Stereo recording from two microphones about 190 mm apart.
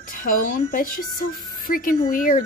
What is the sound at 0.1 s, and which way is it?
Speech, 45° left (ahead or behind).